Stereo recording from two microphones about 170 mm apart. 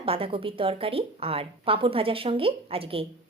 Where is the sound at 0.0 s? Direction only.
35° right (ahead or behind).